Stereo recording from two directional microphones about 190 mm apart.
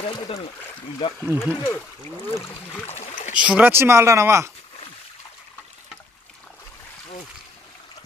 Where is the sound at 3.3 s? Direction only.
5° right (ahead or behind).